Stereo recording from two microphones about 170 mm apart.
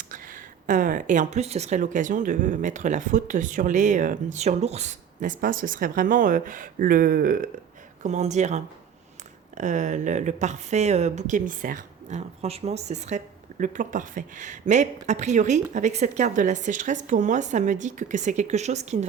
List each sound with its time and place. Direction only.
0.1 s speech: 50° right (ahead or behind)
8.0 s speech: 45° right (ahead or behind)